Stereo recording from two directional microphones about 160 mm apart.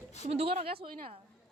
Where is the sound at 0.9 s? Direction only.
50° right (ahead or behind).